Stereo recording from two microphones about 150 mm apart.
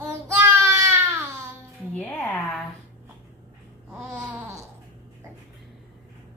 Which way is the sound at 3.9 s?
15° right (ahead or behind).